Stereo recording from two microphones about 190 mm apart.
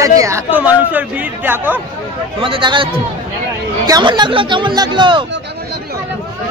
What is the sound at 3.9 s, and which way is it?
Speech, 25° right (ahead or behind).